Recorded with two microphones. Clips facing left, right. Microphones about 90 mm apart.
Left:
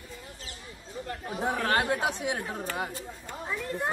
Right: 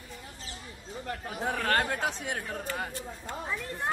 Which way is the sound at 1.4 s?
10° left (ahead or behind).